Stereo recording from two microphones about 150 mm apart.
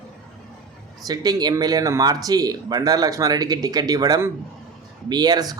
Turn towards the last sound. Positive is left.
turn(degrees=-25)  # may be behind; listen again after turning